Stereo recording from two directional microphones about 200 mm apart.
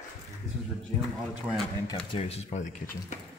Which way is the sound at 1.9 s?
25° left (ahead or behind).